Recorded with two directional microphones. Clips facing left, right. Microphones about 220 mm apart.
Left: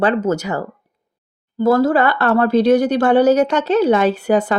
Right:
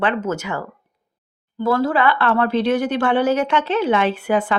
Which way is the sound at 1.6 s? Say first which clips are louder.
Left 4 dB; 40° left (ahead or behind).